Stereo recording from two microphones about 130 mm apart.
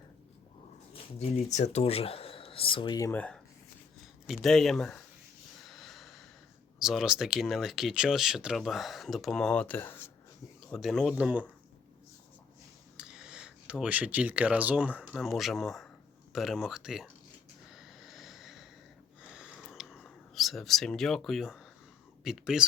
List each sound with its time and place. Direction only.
1.2 s speech: 60° left (ahead or behind); by 3.1 s 35° left (ahead or behind)
3.1 s speech: 10° left (ahead or behind)
4.0 s speech: centre (ahead or behind)
5.6 s snort: centre (ahead or behind)
6.7 s speech: 5° right (ahead or behind); by 10.1 s 15° left (ahead or behind)
10.7 s speech: centre (ahead or behind)
13.0 s speech: 5° right (ahead or behind)
17.7 s a sound: 5° right (ahead or behind)
22.2 s speech: 5° right (ahead or behind)